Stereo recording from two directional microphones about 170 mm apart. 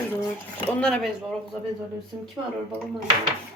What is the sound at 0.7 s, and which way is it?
Speech, 5° left (ahead or behind).